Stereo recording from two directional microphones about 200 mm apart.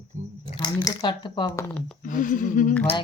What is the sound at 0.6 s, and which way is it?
Speech, 20° left (ahead or behind).